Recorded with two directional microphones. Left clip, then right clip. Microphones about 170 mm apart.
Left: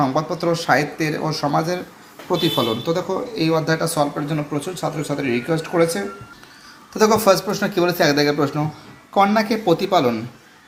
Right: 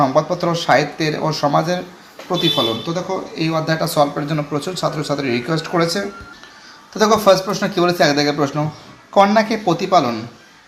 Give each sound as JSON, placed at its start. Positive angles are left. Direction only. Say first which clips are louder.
{"t": 0.0, "sound": "speech", "louder": "right 4 dB", "side_deg": -5}
{"t": 2.3, "sound": "speech", "louder": "right 2 dB", "side_deg": 30}
{"t": 3.9, "sound": "speech", "louder": "right 4 dB", "side_deg": 0}
{"t": 6.9, "sound": "speech", "louder": "right 2 dB", "side_deg": 10}
{"t": 9.6, "sound": "speech", "louder": "right 2 dB", "side_deg": 15}